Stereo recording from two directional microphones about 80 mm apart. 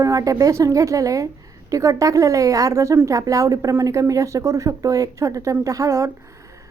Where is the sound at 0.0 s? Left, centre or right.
Right.